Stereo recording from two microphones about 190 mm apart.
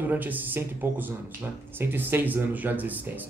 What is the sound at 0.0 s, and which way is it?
Speech, 10° right (ahead or behind).